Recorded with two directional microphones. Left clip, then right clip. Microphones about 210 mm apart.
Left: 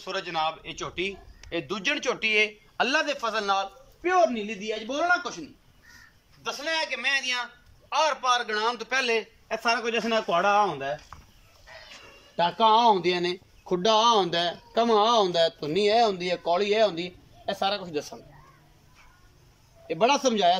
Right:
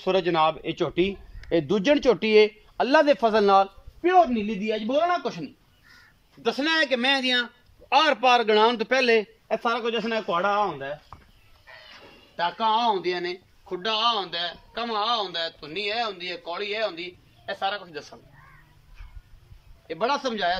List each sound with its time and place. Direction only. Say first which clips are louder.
0.0 s a man's voice: right 7 dB; 40° right (ahead or behind); by 11.0 s centre (ahead or behind)
12.4 s speech: left 3 dB; 15° left (ahead or behind)
19.9 s a man's voice: left 3 dB; 15° left (ahead or behind)